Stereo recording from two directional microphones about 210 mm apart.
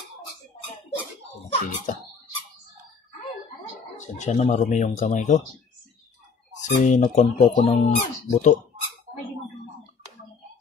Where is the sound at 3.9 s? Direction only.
35° left (ahead or behind).